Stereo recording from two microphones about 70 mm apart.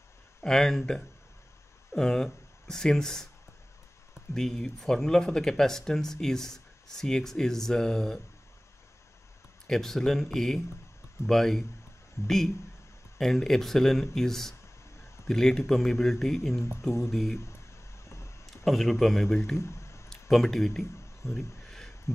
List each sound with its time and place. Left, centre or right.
0.4 s speech: centre
4.3 s speech: centre
9.7 s speech: centre
12.2 s speech: left
13.2 s speech: centre
18.0 s a sound: left
18.6 s speech: centre
19.5 s a sound: left
20.1 s speech: centre
21.2 s speech: left
21.6 s a sound: centre